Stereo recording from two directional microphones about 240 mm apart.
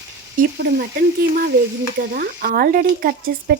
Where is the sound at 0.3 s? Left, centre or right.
Right.